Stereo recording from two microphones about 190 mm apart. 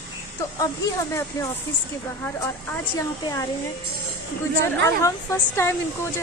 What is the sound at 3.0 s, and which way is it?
Speech, 15° left (ahead or behind).